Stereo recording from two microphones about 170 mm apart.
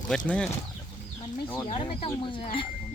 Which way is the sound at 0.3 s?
5° left (ahead or behind).